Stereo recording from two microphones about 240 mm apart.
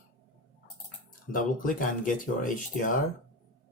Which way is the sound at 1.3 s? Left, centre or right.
Left.